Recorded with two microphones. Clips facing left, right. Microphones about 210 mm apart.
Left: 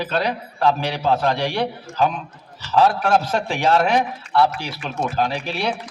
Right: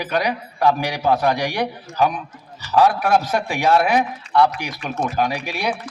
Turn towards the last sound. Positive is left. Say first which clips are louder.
# even
turn(degrees=-10)  # may be behind; listen again after turning